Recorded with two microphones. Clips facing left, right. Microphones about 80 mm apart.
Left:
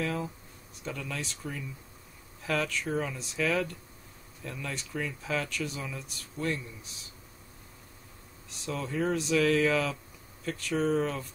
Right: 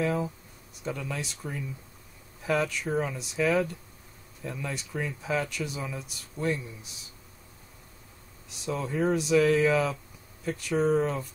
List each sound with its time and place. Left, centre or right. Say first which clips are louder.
0.0 s speech: right 4 dB; centre
8.6 s speech: right 3 dB; centre